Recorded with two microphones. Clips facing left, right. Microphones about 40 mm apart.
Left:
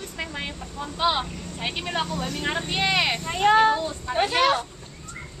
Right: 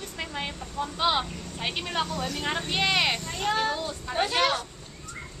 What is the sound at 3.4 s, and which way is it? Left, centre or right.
Speech, left.